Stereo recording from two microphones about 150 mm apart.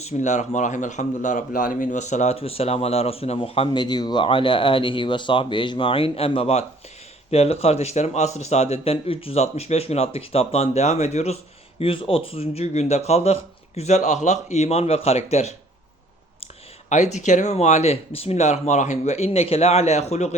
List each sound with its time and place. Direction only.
0.0 s speech: 50° left (ahead or behind)
11.8 s speech: 35° left (ahead or behind)
16.9 s speech: 50° left (ahead or behind)